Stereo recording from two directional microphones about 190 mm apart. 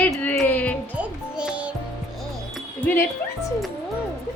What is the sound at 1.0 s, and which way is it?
Music, 5° right (ahead or behind).